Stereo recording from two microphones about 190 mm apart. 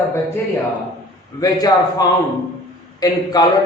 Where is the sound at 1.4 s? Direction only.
20° left (ahead or behind).